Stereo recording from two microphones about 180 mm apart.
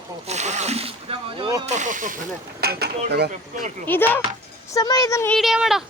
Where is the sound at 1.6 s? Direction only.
40° right (ahead or behind); by 2.9 s 60° right (ahead or behind).